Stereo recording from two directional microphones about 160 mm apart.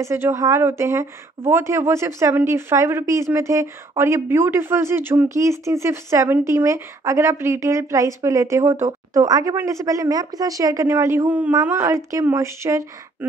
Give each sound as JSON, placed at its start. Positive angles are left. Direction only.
{"t": 0.0, "sound": "speech", "side_deg": -15}